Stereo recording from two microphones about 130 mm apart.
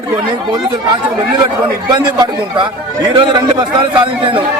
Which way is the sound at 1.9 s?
40° right (ahead or behind).